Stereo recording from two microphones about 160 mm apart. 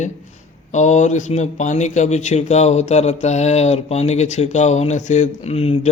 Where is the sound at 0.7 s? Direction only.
50° left (ahead or behind).